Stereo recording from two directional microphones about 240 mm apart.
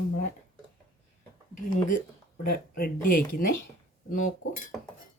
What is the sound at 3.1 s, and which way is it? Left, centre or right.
Speech, left.